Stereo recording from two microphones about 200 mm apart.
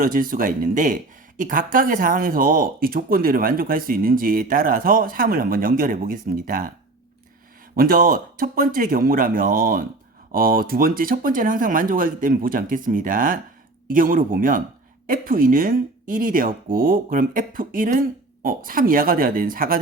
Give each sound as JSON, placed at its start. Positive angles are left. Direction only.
{"t": 0.0, "sound": "speech", "side_deg": -45}
{"t": 7.8, "sound": "speech", "side_deg": -45}